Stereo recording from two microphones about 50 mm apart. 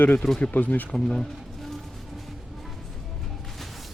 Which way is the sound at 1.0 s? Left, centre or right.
Centre.